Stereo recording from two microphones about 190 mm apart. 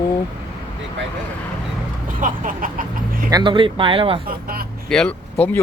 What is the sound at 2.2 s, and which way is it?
Speech, 45° right (ahead or behind).